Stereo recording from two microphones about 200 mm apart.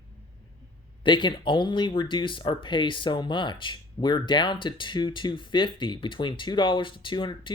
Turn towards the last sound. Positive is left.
turn(degrees=25)  # may be behind; listen again after turning